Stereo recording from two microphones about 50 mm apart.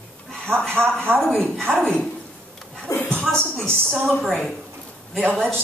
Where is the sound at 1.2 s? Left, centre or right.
Centre.